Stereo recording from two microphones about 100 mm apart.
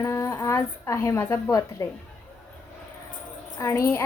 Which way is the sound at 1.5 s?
35° left (ahead or behind).